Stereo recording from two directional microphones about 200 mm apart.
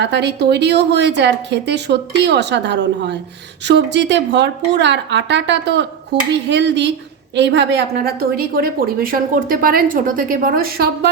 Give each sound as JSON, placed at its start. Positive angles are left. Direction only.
{"t": 0.0, "sound": "a woman's voice", "side_deg": -60}